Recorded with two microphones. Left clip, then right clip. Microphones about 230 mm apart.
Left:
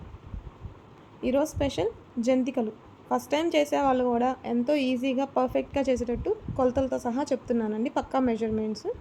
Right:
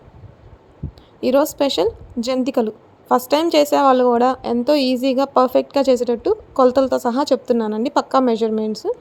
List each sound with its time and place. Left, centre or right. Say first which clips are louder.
1.2 s a woman's voice: right 10 dB; right